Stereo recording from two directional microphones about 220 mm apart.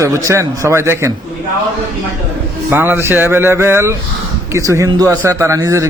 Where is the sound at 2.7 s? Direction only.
10° right (ahead or behind).